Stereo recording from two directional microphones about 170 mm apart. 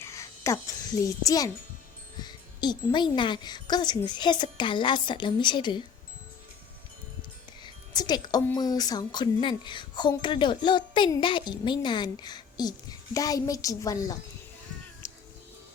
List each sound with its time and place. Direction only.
0.0 s a child's voice: 15° left (ahead or behind)
7.6 s music: 25° left (ahead or behind)
8.5 s a woman's voice: 20° left (ahead or behind)
15.0 s music: 15° left (ahead or behind)